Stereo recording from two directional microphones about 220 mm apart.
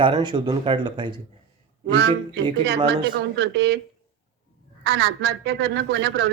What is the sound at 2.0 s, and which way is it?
Speech, 50° right (ahead or behind).